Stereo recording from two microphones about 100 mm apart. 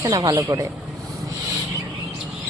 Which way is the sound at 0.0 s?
40° right (ahead or behind).